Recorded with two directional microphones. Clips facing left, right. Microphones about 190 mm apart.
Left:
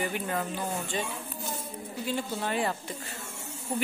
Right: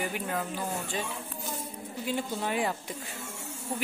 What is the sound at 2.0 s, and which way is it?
Speech, 15° right (ahead or behind).